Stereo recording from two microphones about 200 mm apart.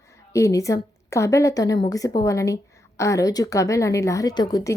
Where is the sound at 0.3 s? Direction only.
15° left (ahead or behind).